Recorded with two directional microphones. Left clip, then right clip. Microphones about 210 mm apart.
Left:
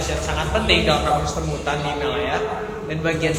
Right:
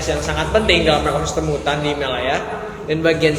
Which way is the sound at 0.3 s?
25° right (ahead or behind).